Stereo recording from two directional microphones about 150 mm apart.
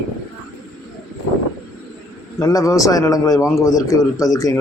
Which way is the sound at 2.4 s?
25° left (ahead or behind).